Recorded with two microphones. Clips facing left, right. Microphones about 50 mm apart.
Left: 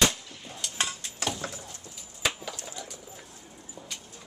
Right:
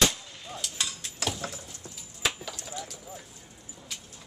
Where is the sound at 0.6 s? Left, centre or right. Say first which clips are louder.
Left 4 dB; centre.